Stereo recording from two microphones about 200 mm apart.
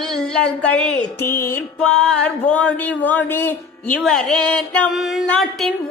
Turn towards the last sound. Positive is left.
turn(degrees=0)  # may be behind; listen again after turning